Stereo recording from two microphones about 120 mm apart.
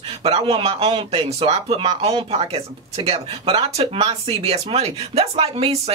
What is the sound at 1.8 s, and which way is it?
Speech, 40° right (ahead or behind).